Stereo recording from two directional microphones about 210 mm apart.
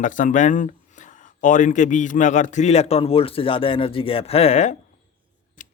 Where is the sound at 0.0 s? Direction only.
40° left (ahead or behind).